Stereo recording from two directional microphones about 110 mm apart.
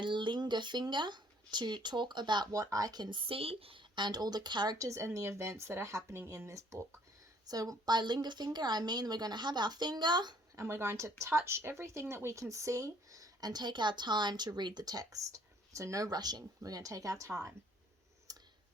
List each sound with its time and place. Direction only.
0.0 s speech: 45° right (ahead or behind)
10.6 s speech: 25° right (ahead or behind)
18.3 s clicking: 35° right (ahead or behind)